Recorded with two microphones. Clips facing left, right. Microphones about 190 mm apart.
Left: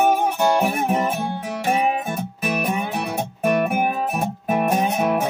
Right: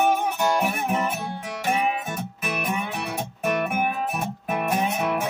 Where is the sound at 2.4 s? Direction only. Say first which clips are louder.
Left 5 dB; 40° left (ahead or behind).